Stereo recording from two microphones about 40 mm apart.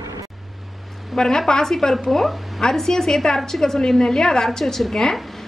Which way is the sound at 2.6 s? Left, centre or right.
Centre.